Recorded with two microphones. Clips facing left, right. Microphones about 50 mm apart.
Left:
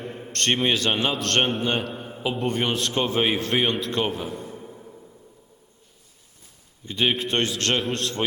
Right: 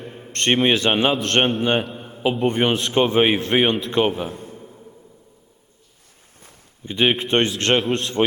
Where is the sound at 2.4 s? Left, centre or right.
Right.